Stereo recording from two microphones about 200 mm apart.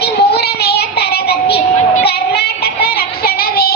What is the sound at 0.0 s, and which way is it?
Child singing, 55° left (ahead or behind).